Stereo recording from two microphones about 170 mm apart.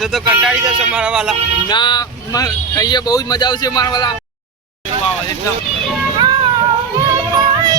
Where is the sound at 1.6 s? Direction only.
25° left (ahead or behind).